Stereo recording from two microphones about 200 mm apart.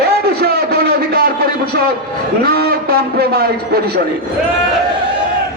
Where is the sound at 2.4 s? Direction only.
50° right (ahead or behind).